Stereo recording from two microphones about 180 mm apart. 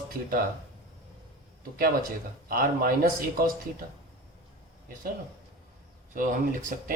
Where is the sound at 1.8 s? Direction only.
55° right (ahead or behind).